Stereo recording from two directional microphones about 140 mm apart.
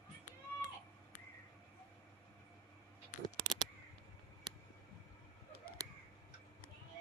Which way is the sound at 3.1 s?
65° left (ahead or behind).